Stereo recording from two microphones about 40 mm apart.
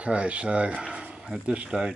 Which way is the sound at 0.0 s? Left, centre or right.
Right.